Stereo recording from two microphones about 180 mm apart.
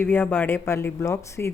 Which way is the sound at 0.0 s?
10° left (ahead or behind).